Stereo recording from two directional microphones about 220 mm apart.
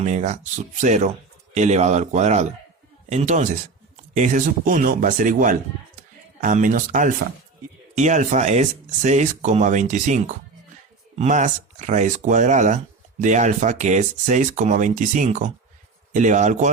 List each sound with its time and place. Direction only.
0.0 s speech: 30° right (ahead or behind)
6.0 s a sound: 35° right (ahead or behind)
7.9 s speech: 35° right (ahead or behind)